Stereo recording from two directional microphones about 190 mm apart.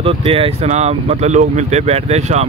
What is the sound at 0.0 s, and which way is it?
Speech, 30° right (ahead or behind).